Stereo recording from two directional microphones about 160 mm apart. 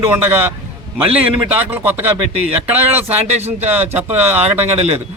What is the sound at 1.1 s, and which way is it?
Speech, 10° right (ahead or behind).